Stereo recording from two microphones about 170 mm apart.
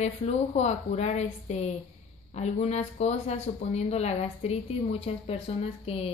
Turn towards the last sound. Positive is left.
turn(degrees=35)  # may be behind; listen again after turning